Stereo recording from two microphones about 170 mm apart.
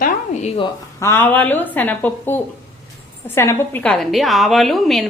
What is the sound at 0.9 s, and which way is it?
A woman's voice, 15° left (ahead or behind).